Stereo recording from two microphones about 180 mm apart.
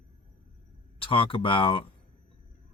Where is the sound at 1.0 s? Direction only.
30° left (ahead or behind).